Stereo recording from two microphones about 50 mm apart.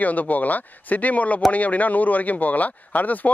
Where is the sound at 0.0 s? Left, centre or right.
Left.